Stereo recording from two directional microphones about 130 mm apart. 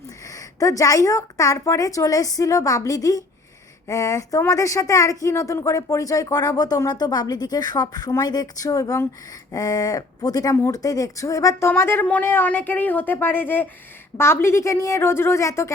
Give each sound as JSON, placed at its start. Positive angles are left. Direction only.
{"t": 0.6, "sound": "a woman's voice", "side_deg": 25}